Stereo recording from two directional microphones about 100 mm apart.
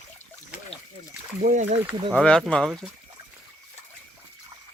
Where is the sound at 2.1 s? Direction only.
5° left (ahead or behind).